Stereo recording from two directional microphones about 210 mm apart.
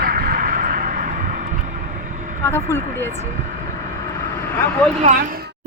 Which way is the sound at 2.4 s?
10° left (ahead or behind).